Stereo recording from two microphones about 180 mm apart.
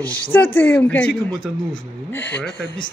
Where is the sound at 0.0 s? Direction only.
10° left (ahead or behind).